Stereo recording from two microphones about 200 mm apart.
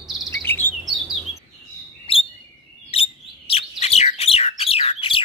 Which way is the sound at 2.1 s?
25° left (ahead or behind).